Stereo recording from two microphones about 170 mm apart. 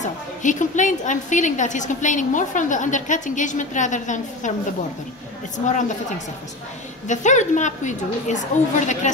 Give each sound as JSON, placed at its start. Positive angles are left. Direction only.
{"t": 0.0, "sound": "a woman's voice", "side_deg": 45}
{"t": 5.7, "sound": "a woman's voice", "side_deg": 45}